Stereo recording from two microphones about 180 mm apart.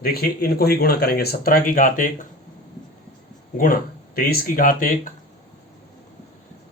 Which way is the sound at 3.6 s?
50° left (ahead or behind).